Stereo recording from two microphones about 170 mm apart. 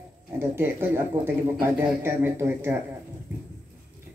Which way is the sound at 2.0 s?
15° right (ahead or behind).